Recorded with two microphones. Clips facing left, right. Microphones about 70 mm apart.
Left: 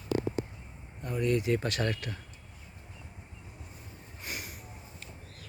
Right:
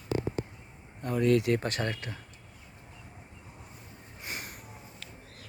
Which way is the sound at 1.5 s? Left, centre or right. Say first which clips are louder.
Left 1 dB; right.